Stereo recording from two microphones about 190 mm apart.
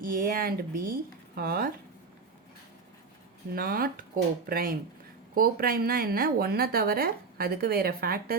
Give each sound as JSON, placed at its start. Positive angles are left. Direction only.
{"t": 0.0, "sound": "speech", "side_deg": -50}
{"t": 3.5, "sound": "speech", "side_deg": -50}